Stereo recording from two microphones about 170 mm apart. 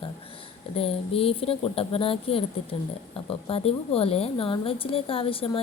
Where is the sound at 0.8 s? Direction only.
35° left (ahead or behind).